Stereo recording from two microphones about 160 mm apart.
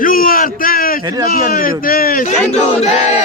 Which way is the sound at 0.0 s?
60° left (ahead or behind).